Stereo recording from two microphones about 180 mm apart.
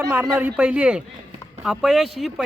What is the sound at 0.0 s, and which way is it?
A man's voice, 10° right (ahead or behind).